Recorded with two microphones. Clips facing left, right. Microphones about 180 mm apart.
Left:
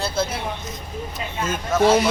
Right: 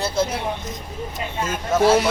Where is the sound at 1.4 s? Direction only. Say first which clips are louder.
Even; 10° right (ahead or behind).